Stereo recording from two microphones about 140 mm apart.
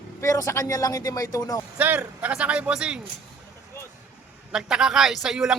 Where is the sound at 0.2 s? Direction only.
20° left (ahead or behind).